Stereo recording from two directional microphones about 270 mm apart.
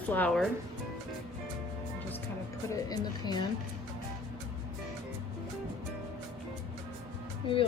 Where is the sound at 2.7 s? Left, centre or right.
Centre.